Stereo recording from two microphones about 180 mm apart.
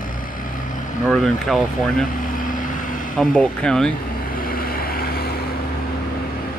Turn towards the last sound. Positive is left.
turn(degrees=55)  # may be behind; listen again after turning